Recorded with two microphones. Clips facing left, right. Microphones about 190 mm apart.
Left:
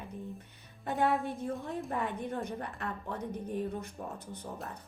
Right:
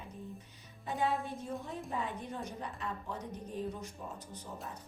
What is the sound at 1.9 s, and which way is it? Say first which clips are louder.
A woman's voice: left 3 dB; 60° left (ahead or behind).